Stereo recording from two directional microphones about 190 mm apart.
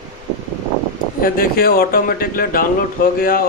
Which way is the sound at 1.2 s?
50° left (ahead or behind).